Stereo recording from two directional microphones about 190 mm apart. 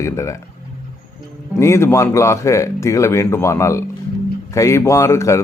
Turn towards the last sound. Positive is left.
turn(degrees=15)  # may be behind; listen again after turning